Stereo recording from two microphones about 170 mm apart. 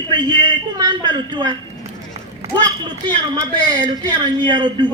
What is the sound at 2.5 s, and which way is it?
A man's voice, 25° right (ahead or behind).